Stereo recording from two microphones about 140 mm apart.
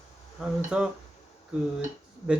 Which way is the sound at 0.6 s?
10° right (ahead or behind).